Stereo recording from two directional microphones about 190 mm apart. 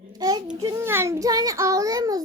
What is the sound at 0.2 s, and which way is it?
A child's voice, 20° right (ahead or behind).